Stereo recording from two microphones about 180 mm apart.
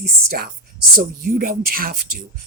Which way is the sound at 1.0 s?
55° right (ahead or behind).